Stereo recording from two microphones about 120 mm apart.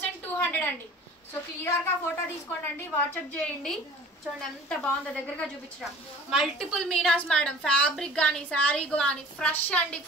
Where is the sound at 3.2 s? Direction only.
5° left (ahead or behind).